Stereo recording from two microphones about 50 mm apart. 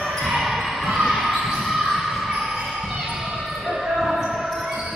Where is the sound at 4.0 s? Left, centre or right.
Centre.